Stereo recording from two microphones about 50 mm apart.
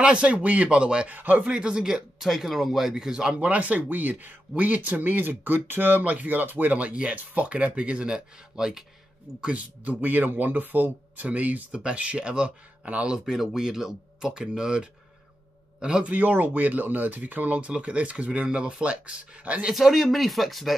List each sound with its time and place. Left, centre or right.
0.0 s speech: right
1.1 s speech: right
1.4 s speech: centre
3.4 s speech: right; by 8.8 s centre
9.4 s speech: right
13.2 s speech: centre
16.1 s speech: right
19.7 s speech: centre